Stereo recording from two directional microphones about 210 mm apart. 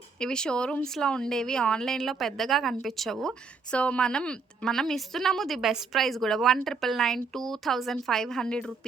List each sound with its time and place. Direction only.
0.2 s a woman's voice: 5° left (ahead or behind)